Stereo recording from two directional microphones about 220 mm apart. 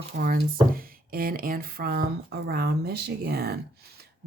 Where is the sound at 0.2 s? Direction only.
40° right (ahead or behind).